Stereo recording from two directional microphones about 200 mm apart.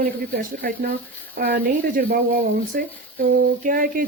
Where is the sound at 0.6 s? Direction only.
45° right (ahead or behind).